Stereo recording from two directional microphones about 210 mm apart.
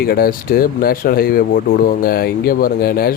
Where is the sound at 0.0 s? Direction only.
45° left (ahead or behind).